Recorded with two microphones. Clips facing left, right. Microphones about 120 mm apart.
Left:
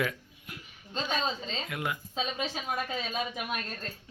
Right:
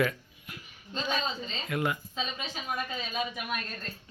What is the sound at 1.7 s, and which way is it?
Speech, 5° left (ahead or behind).